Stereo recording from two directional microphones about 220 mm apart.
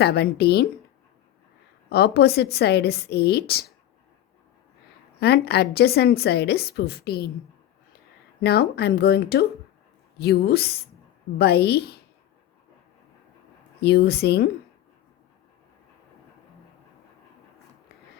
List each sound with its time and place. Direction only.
0.0 s a woman's voice: 45° left (ahead or behind)
1.9 s a woman's voice: 50° left (ahead or behind)
5.2 s a woman's voice: 50° left (ahead or behind)
8.4 s a woman's voice: 45° left (ahead or behind)
13.8 s a woman's voice: 45° left (ahead or behind)